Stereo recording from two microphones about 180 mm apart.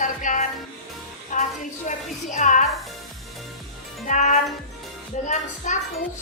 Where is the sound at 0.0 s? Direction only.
45° left (ahead or behind).